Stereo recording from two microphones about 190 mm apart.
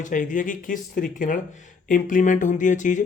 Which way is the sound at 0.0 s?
45° left (ahead or behind).